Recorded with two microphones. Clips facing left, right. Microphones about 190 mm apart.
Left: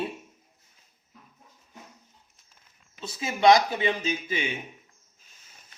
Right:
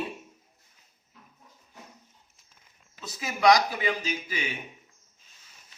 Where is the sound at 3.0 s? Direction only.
25° left (ahead or behind).